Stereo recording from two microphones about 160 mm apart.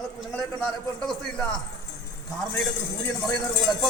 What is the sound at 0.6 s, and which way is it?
Speech, 5° left (ahead or behind).